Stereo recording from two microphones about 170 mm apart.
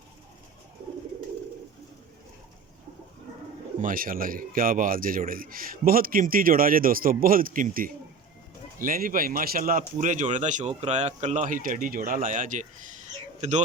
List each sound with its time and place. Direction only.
3.8 s speech: 55° right (ahead or behind)